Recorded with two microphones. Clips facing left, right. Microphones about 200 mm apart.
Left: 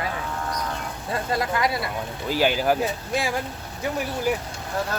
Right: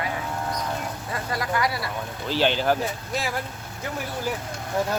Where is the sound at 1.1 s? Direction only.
25° left (ahead or behind).